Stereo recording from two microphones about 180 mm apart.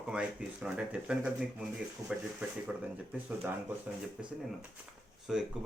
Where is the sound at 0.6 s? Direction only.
5° right (ahead or behind).